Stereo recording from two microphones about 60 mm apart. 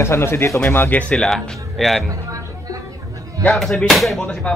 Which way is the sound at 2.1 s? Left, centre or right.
Right.